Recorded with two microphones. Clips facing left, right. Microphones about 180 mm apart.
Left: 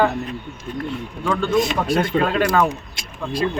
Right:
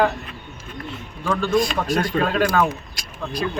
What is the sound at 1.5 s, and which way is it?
Speech, 25° left (ahead or behind).